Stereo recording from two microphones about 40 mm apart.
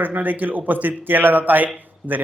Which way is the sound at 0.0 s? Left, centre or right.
Right.